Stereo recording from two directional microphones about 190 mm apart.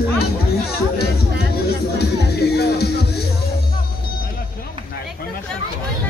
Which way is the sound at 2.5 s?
55° left (ahead or behind).